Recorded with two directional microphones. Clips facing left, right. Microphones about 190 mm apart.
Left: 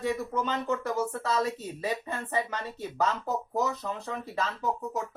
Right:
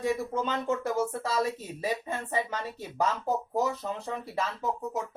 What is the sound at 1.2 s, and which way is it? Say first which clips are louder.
Speech: left 1 dB; 10° right (ahead or behind).